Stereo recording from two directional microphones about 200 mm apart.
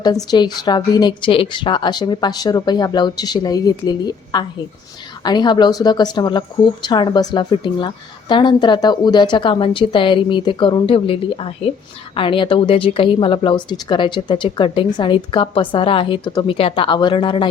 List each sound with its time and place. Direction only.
0.0 s a woman's voice: 20° left (ahead or behind)